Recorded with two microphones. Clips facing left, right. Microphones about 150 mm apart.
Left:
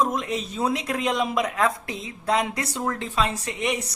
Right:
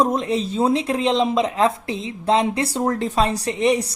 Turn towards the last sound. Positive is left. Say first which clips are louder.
# right 8 dB
turn(degrees=-35)  # may be behind; listen again after turning